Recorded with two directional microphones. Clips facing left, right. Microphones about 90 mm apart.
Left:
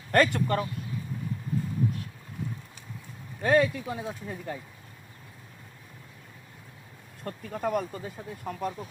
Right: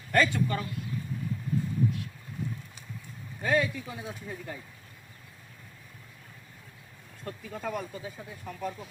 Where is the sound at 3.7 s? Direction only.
55° left (ahead or behind).